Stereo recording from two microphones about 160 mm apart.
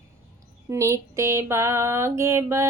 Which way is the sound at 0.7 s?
15° right (ahead or behind).